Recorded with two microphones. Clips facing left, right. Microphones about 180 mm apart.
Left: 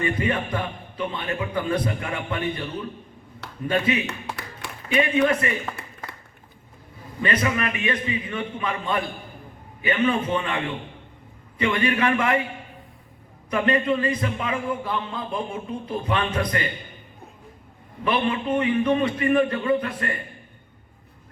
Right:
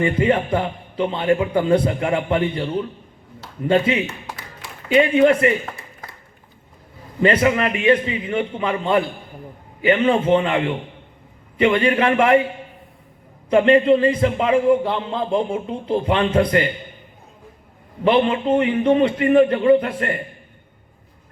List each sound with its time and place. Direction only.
0.0 s a man's voice: 30° right (ahead or behind)
4.0 s a sound: 65° left (ahead or behind)
4.9 s a man's voice: 30° right (ahead or behind)
7.2 s a man's voice: 30° right (ahead or behind)
13.5 s a man's voice: 25° right (ahead or behind)
18.0 s a man's voice: 25° right (ahead or behind)